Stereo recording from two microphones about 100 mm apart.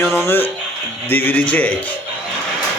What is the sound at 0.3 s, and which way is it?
A man's voice, 20° left (ahead or behind).